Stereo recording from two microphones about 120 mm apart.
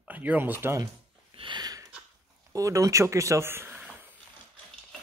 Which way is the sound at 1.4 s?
40° right (ahead or behind).